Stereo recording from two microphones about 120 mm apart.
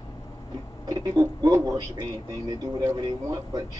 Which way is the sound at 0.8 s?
30° right (ahead or behind).